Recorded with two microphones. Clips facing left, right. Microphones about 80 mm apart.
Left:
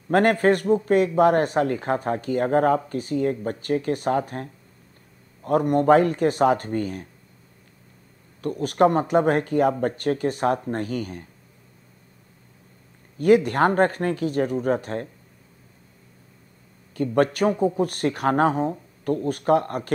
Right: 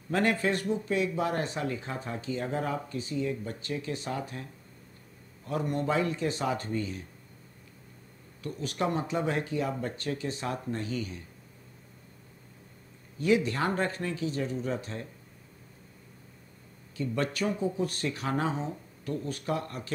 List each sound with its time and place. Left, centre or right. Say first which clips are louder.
0.1 s speech: left 9 dB; left
8.4 s speech: left 12 dB; left
13.2 s speech: left 9 dB; left
16.9 s speech: left 10 dB; left